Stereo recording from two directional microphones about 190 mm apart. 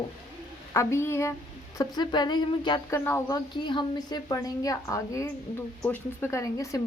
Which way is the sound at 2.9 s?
10° left (ahead or behind).